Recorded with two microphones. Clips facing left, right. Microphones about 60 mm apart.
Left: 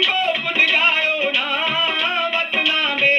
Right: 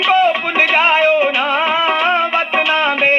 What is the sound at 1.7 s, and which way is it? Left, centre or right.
Music, right.